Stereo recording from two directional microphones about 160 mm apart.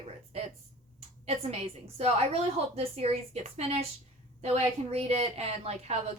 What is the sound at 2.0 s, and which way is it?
A woman's voice, 40° right (ahead or behind).